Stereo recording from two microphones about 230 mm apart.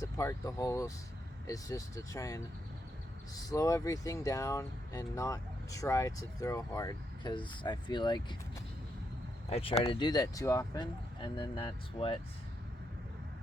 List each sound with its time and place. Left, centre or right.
0.0 s speech: centre
9.5 s speech: left